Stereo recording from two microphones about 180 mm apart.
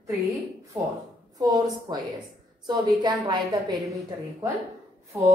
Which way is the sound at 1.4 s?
20° right (ahead or behind).